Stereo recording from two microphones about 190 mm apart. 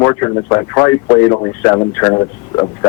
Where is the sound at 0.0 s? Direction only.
20° left (ahead or behind).